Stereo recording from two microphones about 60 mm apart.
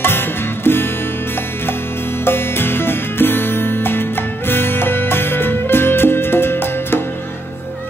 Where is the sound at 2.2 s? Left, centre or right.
Left.